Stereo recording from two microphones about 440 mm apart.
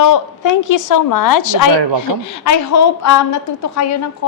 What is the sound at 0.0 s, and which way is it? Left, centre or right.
A woman's voice, left.